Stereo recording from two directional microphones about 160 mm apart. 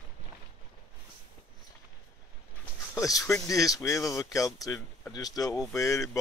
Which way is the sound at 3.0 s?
20° left (ahead or behind).